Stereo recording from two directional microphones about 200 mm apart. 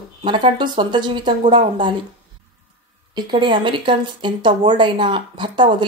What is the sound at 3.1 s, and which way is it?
Speech, 25° right (ahead or behind).